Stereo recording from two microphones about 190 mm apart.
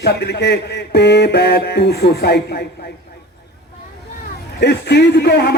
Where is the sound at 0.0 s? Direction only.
60° left (ahead or behind).